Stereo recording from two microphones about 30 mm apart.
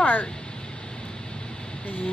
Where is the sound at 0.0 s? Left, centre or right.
Left.